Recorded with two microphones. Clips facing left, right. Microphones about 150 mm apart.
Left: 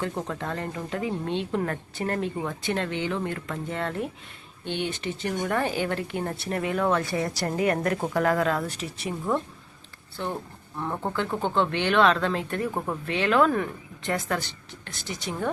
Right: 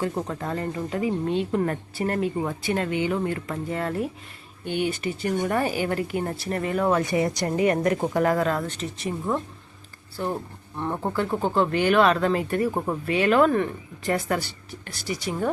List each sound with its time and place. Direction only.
0.0 s speech: 5° right (ahead or behind)
6.8 s speech: 15° right (ahead or behind)
7.4 s speech: 5° right (ahead or behind)